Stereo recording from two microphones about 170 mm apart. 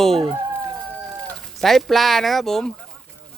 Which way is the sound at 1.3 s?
Centre (ahead or behind).